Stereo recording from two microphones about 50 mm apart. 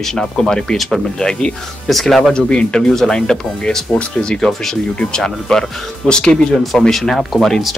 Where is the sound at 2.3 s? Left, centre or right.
Centre.